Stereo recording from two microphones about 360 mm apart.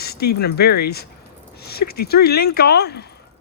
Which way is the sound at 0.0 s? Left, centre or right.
Left.